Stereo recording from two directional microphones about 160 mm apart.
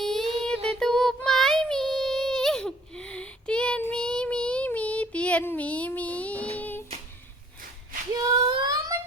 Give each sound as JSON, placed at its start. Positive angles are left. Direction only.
{"t": 0.0, "sound": "child singing", "side_deg": 0}
{"t": 8.1, "sound": "child singing", "side_deg": -30}